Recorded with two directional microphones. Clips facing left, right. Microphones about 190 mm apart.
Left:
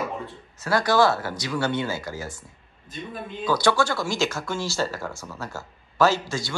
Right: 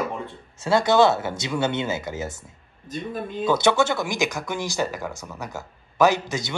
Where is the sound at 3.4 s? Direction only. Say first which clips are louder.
Right 2 dB; 25° right (ahead or behind).